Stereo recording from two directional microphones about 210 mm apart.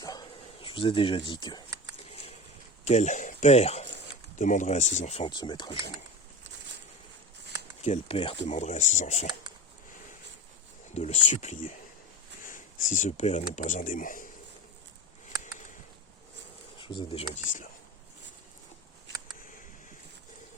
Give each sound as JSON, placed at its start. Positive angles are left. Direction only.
{"t": 0.0, "sound": "bow-wow", "side_deg": 20}
{"t": 2.8, "sound": "speech", "side_deg": 30}
{"t": 7.9, "sound": "speech", "side_deg": 25}
{"t": 10.9, "sound": "speech", "side_deg": 35}
{"t": 16.8, "sound": "speech", "side_deg": 20}